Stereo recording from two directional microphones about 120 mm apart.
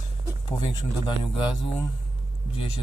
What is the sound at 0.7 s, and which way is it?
A man's voice, 45° left (ahead or behind).